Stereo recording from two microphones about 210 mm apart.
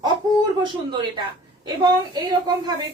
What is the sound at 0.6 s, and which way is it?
A woman's voice, 20° right (ahead or behind).